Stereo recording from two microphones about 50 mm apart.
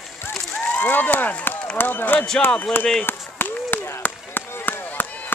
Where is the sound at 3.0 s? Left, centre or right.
Left.